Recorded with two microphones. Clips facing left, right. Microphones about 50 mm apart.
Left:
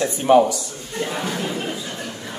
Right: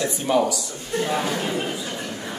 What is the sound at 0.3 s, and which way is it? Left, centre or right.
Speech, left.